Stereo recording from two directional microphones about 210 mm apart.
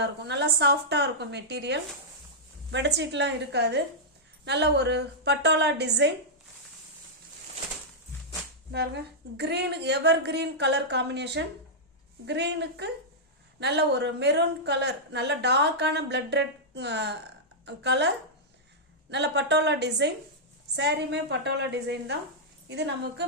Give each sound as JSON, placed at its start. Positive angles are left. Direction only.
{"t": 0.0, "sound": "a woman's voice", "side_deg": -55}
{"t": 8.7, "sound": "a woman's voice", "side_deg": -50}
{"t": 19.1, "sound": "a woman's voice", "side_deg": -55}